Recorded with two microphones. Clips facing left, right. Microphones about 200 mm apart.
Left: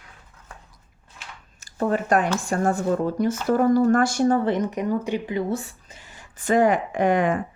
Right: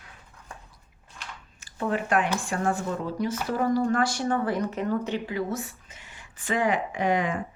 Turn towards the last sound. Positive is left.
turn(degrees=55)  # may be behind; listen again after turning